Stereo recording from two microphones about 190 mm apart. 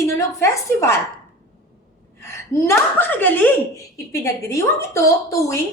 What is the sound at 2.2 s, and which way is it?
Speech, 10° left (ahead or behind).